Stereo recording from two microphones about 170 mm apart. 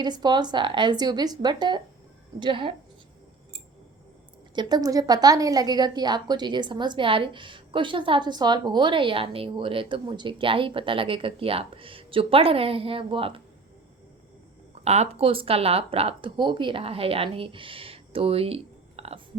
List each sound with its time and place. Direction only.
0.0 s a woman's voice: 25° right (ahead or behind)
4.5 s a woman's voice: 25° right (ahead or behind)
14.8 s a woman's voice: 40° right (ahead or behind)